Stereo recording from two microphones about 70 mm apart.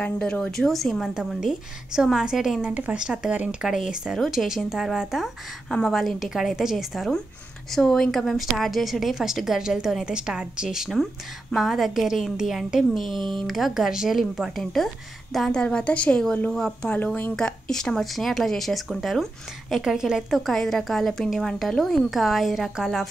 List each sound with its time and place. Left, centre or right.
0.2 s a woman's voice: centre
2.6 s a woman's voice: centre
15.5 s a woman's voice: centre
16.9 s speech: left
17.4 s a woman's voice: centre